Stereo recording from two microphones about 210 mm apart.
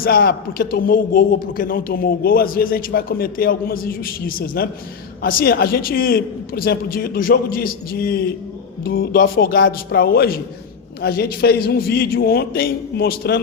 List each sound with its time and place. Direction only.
0.0 s a man's voice: 45° left (ahead or behind)